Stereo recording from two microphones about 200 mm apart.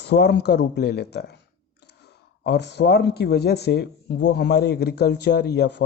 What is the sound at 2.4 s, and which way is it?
Speech, 60° left (ahead or behind).